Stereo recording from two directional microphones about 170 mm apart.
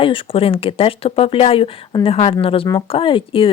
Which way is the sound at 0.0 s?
30° left (ahead or behind).